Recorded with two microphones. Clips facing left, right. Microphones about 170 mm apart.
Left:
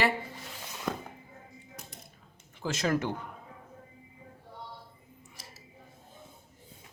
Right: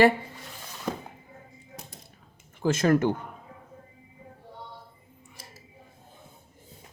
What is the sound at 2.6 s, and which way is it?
Speech, 50° right (ahead or behind).